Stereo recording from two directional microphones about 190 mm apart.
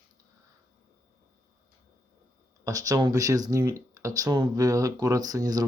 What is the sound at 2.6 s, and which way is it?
Speech, 20° right (ahead or behind).